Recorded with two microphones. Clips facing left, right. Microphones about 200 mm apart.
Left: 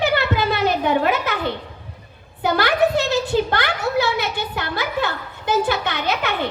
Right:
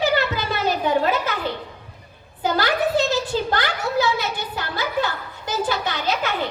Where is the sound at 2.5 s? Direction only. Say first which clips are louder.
Left 2 dB; 65° left (ahead or behind).